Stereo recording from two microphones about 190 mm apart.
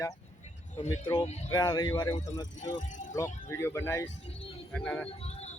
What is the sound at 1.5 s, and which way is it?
Speech, 20° left (ahead or behind).